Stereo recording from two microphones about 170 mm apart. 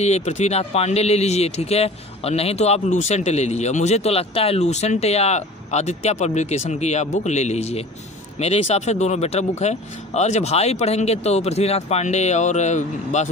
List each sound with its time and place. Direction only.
0.0 s speech: 40° left (ahead or behind)